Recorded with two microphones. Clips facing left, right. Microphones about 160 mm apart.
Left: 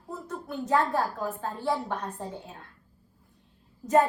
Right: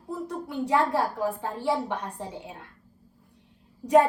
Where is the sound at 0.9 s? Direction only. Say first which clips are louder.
Right 3 dB; 75° right (ahead or behind).